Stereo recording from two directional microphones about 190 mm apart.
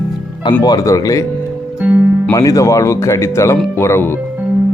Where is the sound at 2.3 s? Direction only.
15° left (ahead or behind).